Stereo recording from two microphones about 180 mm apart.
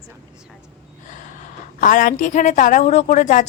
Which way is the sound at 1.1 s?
45° left (ahead or behind).